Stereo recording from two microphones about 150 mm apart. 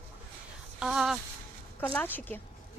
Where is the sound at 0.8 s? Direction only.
5° right (ahead or behind).